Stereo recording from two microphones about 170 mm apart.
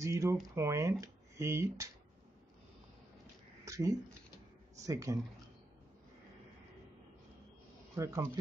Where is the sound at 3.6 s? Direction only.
20° right (ahead or behind).